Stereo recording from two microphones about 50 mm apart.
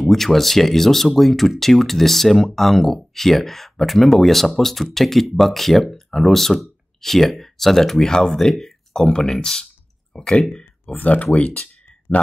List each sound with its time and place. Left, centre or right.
0.0 s speech: centre
10.6 s a sound: left
11.3 s speech: left